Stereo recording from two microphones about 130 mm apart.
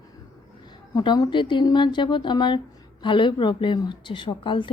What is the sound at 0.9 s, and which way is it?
A woman's voice, 35° left (ahead or behind).